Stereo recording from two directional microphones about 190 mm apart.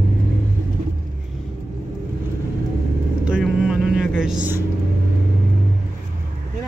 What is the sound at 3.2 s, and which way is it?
Vehicle, 5° right (ahead or behind).